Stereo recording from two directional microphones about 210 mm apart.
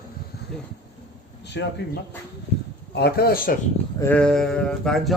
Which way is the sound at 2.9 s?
50° left (ahead or behind).